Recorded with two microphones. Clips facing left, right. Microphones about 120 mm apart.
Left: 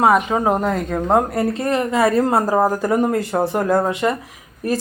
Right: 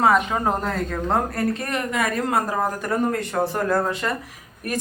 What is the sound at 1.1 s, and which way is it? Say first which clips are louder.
Speech: left 6 dB; 25° left (ahead or behind).